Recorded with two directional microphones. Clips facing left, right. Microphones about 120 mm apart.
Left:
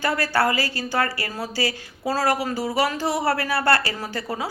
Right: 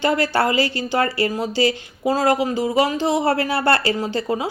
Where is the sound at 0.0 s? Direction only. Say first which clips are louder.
Right 3 dB; 25° right (ahead or behind).